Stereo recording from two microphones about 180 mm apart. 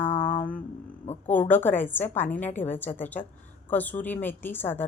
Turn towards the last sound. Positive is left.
turn(degrees=10)  # may be behind; listen again after turning